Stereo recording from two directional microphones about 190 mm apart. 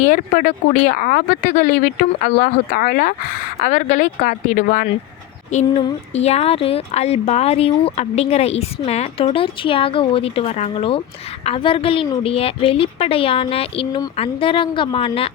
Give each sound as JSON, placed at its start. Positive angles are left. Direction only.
{"t": 0.0, "sound": "a woman's voice", "side_deg": 45}